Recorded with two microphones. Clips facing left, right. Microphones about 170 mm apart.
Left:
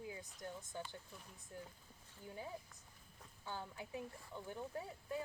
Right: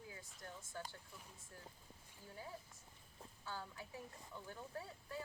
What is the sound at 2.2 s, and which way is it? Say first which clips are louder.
Speech: left 4 dB; 20° left (ahead or behind).